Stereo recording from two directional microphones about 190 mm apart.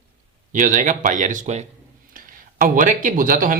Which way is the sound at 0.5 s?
40° right (ahead or behind).